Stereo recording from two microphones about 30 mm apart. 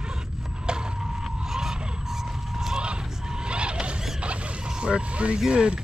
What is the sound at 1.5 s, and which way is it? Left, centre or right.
Vehicle, centre.